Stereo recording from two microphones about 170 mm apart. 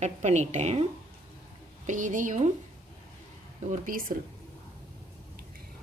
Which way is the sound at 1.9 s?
50° right (ahead or behind).